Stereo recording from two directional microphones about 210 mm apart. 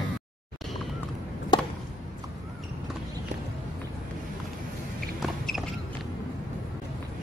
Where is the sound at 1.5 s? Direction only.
20° left (ahead or behind).